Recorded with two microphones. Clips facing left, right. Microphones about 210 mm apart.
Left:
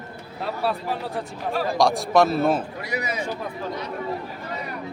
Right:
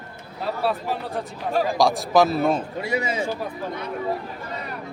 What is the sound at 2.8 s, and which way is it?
Speech, 25° right (ahead or behind).